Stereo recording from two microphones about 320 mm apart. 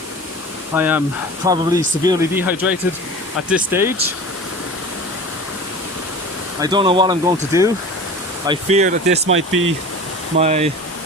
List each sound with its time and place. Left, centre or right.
0.7 s speech: centre
6.6 s speech: centre
9.5 s speech: right
10.3 s speech: centre